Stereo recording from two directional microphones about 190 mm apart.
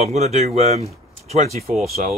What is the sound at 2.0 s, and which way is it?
Speech, 45° right (ahead or behind).